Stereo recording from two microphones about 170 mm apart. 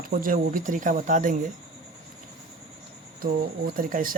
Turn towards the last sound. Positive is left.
turn(degrees=-55)  # may be behind; listen again after turning